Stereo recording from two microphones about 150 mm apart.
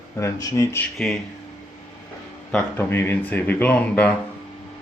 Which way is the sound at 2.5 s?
10° left (ahead or behind).